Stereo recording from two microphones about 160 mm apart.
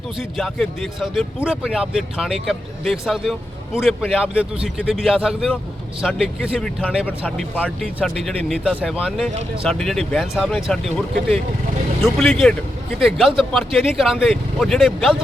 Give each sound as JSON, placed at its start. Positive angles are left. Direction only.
{"t": 0.2, "sound": "a man's voice", "side_deg": 0}
{"t": 7.3, "sound": "a man's voice", "side_deg": 5}